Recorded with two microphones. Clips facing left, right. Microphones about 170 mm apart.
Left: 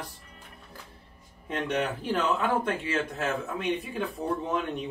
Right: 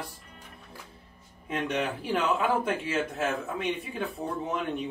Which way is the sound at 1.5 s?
10° right (ahead or behind).